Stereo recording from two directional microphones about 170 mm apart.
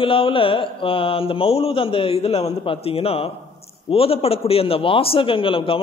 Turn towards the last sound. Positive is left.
turn(degrees=30)  # may be behind; listen again after turning